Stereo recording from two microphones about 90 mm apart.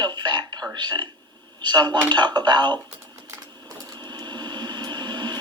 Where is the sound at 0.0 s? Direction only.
55° right (ahead or behind).